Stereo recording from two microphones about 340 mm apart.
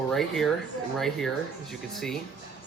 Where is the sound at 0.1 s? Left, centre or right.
Centre.